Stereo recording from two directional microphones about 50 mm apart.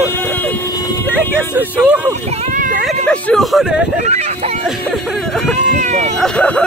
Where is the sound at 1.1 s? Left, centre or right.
Right.